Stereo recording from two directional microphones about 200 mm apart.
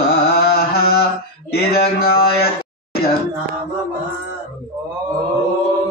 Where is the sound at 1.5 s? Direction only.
50° left (ahead or behind).